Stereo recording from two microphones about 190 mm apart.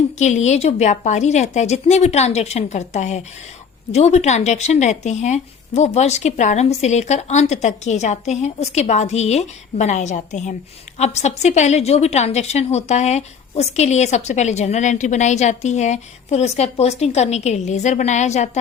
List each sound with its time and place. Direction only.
0.2 s a woman's voice: 35° left (ahead or behind)